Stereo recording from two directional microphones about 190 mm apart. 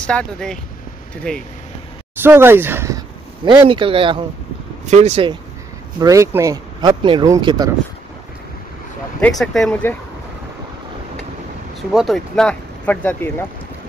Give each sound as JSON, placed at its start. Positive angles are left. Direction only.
{"t": 0.0, "sound": "speech", "side_deg": 5}
{"t": 2.2, "sound": "speech", "side_deg": -10}
{"t": 3.4, "sound": "speech", "side_deg": -25}
{"t": 5.9, "sound": "speech", "side_deg": -15}
{"t": 9.4, "sound": "speech", "side_deg": 0}
{"t": 11.9, "sound": "speech", "side_deg": 0}